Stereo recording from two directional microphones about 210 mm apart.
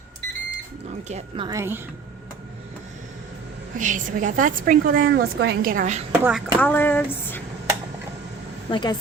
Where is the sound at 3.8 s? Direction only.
35° right (ahead or behind).